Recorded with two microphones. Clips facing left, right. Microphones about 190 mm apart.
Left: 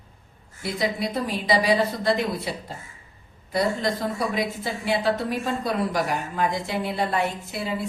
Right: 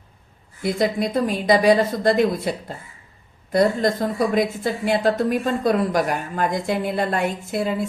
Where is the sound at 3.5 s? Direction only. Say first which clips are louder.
Right 6 dB; 50° right (ahead or behind).